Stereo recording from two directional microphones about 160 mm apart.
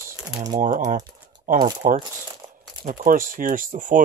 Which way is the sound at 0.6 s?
55° right (ahead or behind).